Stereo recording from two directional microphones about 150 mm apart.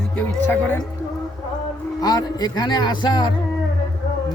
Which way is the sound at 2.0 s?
25° left (ahead or behind).